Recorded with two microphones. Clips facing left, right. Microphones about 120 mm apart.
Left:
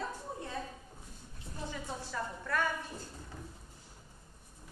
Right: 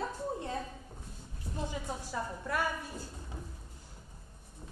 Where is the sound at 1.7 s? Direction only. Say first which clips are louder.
Right 2 dB; 15° right (ahead or behind).